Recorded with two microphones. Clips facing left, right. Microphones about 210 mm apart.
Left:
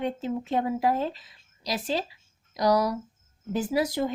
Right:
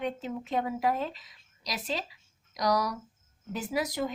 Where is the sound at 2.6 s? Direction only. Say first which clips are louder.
Left 5 dB; 30° left (ahead or behind).